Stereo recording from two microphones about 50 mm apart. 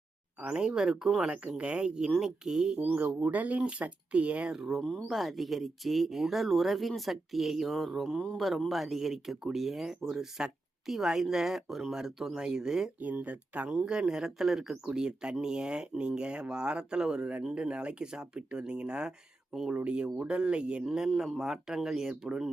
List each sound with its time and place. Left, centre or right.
0.3 s speech: centre
1.3 s speech: right
3.2 s speech: right
4.5 s speech: centre
4.8 s speech: centre
5.0 s speech: centre
13.0 s speech: right
13.7 s speech: centre
20.8 s speech: centre